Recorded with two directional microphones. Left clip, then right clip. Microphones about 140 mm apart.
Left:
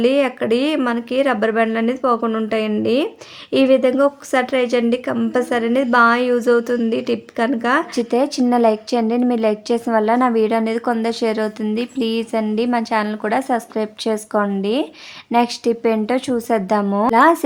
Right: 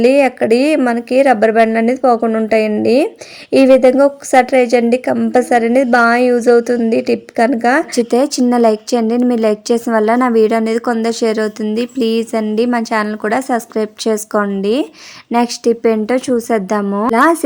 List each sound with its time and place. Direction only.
0.0 s a woman's voice: 35° right (ahead or behind)